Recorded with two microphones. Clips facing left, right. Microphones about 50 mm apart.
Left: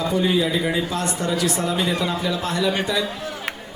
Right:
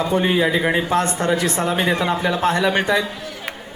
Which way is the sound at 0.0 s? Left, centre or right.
Right.